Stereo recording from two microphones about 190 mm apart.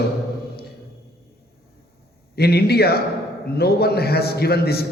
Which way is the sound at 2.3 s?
55° left (ahead or behind).